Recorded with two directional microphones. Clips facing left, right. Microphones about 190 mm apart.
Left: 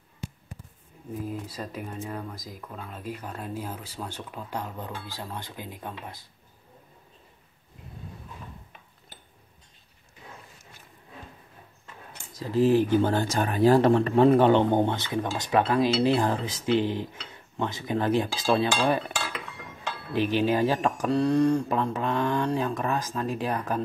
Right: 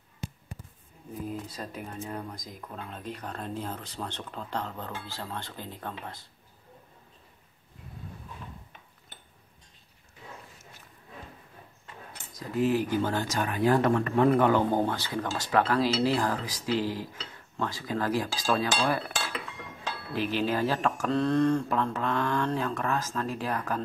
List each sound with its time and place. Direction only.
1.2 s speech: 5° left (ahead or behind)
12.4 s speech: 30° left (ahead or behind)